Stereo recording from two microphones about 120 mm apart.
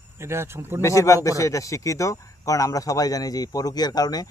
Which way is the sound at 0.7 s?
25° left (ahead or behind).